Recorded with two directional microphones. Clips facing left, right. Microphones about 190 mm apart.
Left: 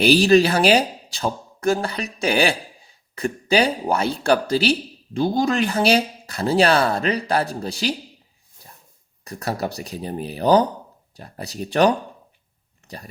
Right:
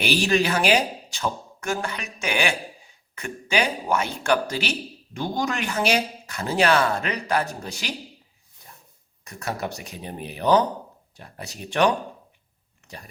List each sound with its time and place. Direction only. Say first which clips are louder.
0.0 s speech: left 8 dB; 35° left (ahead or behind)
9.2 s speech: left 4 dB; 35° left (ahead or behind)